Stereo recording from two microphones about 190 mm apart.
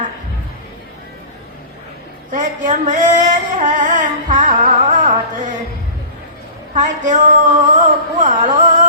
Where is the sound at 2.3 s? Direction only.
40° right (ahead or behind).